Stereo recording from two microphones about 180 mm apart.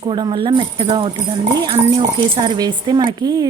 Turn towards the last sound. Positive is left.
turn(degrees=-25)  # may be behind; listen again after turning